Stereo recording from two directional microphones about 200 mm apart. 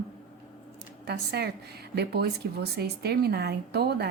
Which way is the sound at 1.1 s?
55° right (ahead or behind).